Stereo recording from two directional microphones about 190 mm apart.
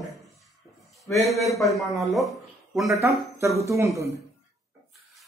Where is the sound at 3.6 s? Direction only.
15° right (ahead or behind).